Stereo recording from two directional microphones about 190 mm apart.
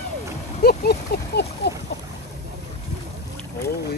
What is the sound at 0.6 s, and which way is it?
Speech, 55° left (ahead or behind).